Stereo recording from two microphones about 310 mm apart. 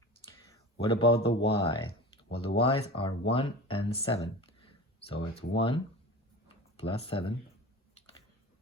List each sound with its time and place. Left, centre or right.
0.3 s a sound: centre
1.5 s speech: centre
7.9 s typing: centre